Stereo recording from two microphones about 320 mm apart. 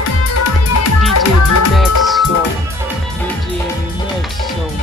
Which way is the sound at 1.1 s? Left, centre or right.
Left.